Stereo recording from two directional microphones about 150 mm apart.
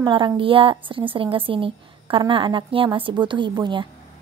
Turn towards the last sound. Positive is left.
turn(degrees=-30)  # may be behind; listen again after turning